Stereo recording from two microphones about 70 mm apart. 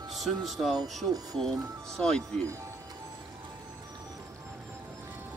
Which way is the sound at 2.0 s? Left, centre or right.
Centre.